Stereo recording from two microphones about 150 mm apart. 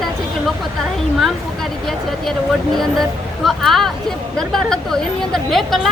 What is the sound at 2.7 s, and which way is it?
Speech, centre (ahead or behind).